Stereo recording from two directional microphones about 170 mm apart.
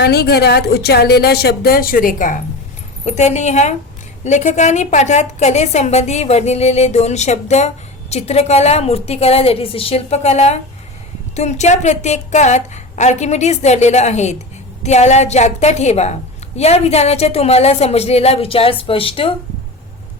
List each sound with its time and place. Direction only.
0.0 s a woman's voice: 70° left (ahead or behind); by 19.3 s 35° left (ahead or behind)